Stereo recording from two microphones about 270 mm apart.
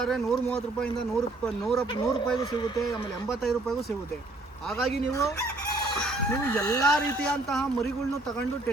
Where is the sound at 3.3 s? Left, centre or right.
Centre.